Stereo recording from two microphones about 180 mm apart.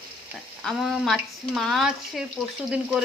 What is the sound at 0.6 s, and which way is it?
Speech, centre (ahead or behind).